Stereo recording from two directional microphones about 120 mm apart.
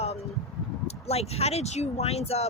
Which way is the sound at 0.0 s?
60° left (ahead or behind).